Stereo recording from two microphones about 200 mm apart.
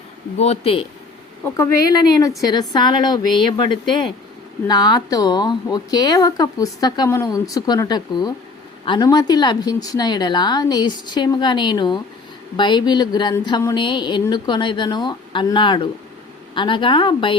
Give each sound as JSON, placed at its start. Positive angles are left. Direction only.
{"t": 0.3, "sound": "speech", "side_deg": 30}
{"t": 1.5, "sound": "speech", "side_deg": 15}